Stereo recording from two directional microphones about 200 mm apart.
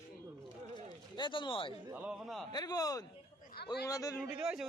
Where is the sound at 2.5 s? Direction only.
20° left (ahead or behind).